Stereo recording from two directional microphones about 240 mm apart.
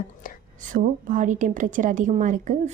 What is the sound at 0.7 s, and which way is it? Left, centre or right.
A woman's voice, right.